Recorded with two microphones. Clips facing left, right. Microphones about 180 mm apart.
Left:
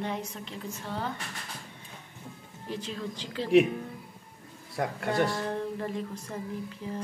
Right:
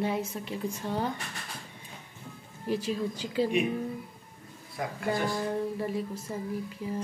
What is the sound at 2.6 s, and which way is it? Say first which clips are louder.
Speech: right 6 dB; 10° right (ahead or behind).